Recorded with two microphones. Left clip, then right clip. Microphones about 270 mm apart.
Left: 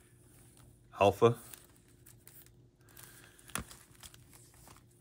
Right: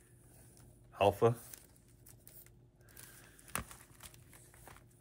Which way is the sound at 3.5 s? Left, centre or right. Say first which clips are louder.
Left 1 dB; centre.